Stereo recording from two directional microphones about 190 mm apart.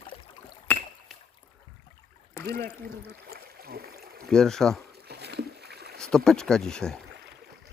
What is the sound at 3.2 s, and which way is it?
Boat, 55° right (ahead or behind).